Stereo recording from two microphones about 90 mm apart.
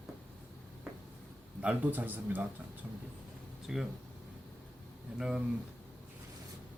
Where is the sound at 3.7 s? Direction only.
5° right (ahead or behind).